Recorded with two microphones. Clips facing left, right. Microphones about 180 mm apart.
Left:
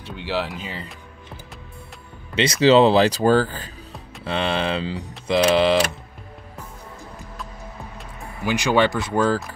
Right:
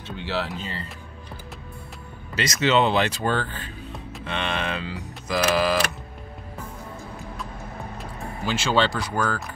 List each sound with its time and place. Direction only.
0.0 s a sound: 10° left (ahead or behind)
0.6 s speech: 15° left (ahead or behind)
2.3 s speech: 30° left (ahead or behind)
8.5 s speech: 15° left (ahead or behind)
9.1 s speech: 25° left (ahead or behind)